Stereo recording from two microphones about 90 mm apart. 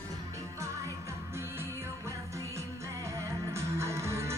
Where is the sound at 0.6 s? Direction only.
30° right (ahead or behind).